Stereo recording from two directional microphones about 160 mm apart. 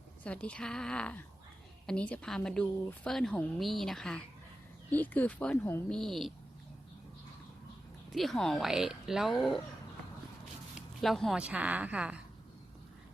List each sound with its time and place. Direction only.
0.3 s speech: 10° left (ahead or behind)
8.1 s speech: centre (ahead or behind)
10.8 s speech: centre (ahead or behind)